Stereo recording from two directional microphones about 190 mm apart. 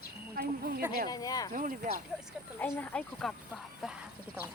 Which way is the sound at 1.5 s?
45° right (ahead or behind).